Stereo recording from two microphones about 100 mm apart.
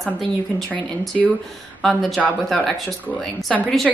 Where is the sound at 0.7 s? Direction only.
15° left (ahead or behind).